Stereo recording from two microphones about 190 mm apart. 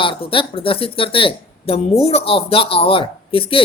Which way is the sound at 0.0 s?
30° left (ahead or behind).